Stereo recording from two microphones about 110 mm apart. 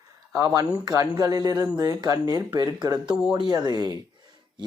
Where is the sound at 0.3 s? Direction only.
30° right (ahead or behind).